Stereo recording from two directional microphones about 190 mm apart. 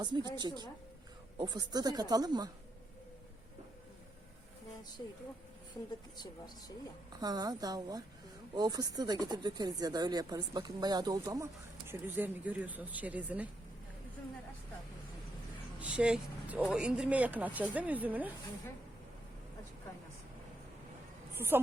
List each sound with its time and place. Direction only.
0.0 s speech: 20° right (ahead or behind)
5.0 s speech: 20° left (ahead or behind)
6.1 s speech: 20° left (ahead or behind)
7.1 s speech: 20° right (ahead or behind)
15.8 s speech: 5° right (ahead or behind)
21.3 s a woman's voice: 10° right (ahead or behind)